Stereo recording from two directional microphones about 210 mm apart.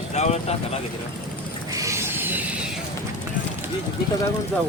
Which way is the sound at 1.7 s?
15° right (ahead or behind).